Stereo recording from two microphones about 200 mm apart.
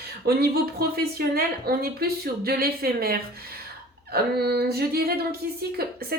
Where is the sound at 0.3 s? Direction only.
50° right (ahead or behind).